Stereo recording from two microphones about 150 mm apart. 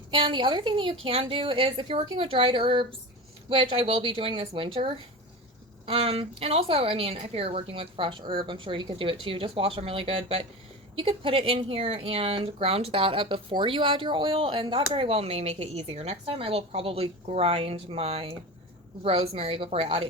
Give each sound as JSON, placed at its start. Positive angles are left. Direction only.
{"t": 0.1, "sound": "speech", "side_deg": -35}